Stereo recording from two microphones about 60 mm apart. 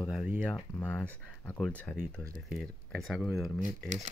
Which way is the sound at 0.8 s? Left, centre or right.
Centre.